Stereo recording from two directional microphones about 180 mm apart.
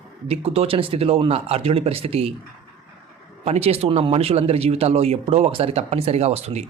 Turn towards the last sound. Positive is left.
turn(degrees=-35)  # may be behind; listen again after turning